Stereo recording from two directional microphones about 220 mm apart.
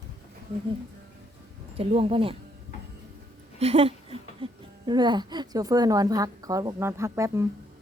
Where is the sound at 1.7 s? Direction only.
25° right (ahead or behind).